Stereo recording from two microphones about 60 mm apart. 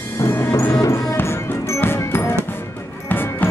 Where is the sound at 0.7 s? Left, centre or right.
Left.